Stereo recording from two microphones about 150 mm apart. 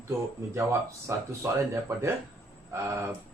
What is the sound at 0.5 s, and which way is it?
Speech, 20° right (ahead or behind).